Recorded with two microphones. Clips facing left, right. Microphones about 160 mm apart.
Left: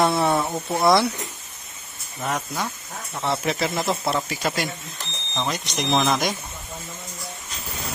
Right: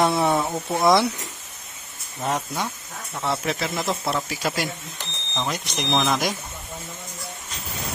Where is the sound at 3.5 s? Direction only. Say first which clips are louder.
Left 2 dB; 5° left (ahead or behind).